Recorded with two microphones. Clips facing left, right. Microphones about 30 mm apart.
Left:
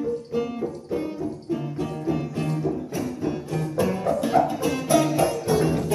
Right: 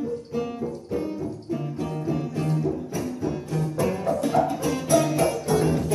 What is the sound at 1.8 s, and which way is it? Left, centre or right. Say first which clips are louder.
Music: left 1 dB; centre.